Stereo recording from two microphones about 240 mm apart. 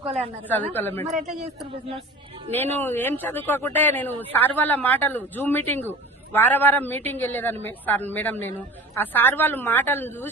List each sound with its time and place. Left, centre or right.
0.4 s speech: centre
1.0 s speech: right
2.5 s speech: centre